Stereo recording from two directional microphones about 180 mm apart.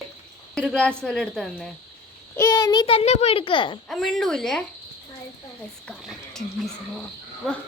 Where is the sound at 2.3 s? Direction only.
15° left (ahead or behind).